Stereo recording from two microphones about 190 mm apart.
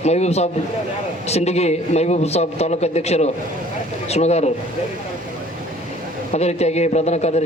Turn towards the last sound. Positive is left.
turn(degrees=35)  # may be behind; listen again after turning